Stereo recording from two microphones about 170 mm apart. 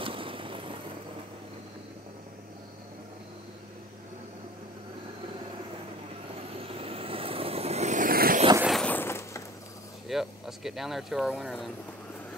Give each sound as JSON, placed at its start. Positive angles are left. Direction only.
{"t": 0.0, "sound": "vehicle", "side_deg": -30}
{"t": 6.6, "sound": "vehicle", "side_deg": -35}
{"t": 8.6, "sound": "a sound", "side_deg": 5}
{"t": 10.0, "sound": "speech", "side_deg": 0}